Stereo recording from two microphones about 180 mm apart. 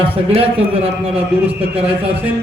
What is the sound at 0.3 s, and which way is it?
Speech, 30° right (ahead or behind).